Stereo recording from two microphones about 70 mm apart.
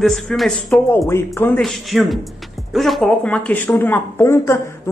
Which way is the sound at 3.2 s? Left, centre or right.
Centre.